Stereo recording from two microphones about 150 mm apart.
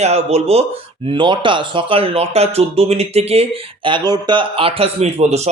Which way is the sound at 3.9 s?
30° right (ahead or behind).